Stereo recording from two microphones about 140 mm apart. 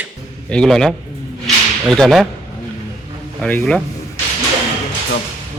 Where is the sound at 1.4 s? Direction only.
Centre (ahead or behind).